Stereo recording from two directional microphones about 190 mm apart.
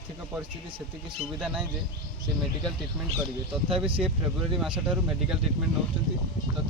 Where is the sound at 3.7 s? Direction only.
5° right (ahead or behind).